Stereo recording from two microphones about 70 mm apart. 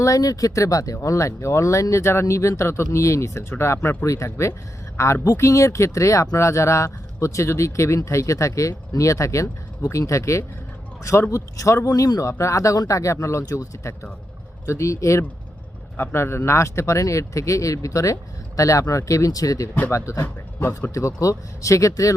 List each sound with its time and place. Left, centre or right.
0.0 s speech: left
11.9 s speech: left
12.2 s speech: left
16.0 s speech: left
20.2 s speech: left
21.2 s speech: left